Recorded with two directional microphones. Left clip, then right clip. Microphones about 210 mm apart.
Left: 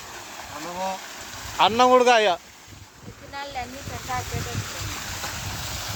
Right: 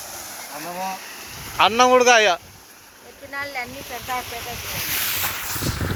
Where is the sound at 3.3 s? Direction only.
35° right (ahead or behind).